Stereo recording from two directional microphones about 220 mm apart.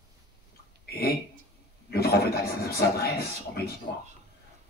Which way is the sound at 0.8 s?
45° left (ahead or behind).